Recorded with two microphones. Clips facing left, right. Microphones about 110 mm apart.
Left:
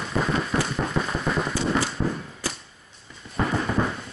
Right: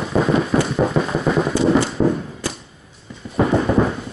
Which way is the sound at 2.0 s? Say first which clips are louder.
Right 9 dB; 35° right (ahead or behind).